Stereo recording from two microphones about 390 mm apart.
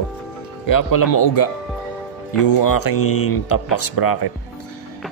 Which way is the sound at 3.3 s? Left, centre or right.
Left.